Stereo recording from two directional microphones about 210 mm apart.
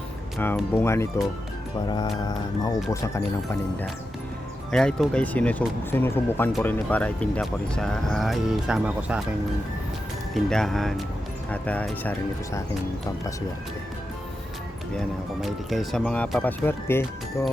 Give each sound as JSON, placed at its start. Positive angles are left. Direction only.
{"t": 0.3, "sound": "speech", "side_deg": 10}
{"t": 4.7, "sound": "speech", "side_deg": 5}
{"t": 10.3, "sound": "speech", "side_deg": 0}
{"t": 14.9, "sound": "speech", "side_deg": 0}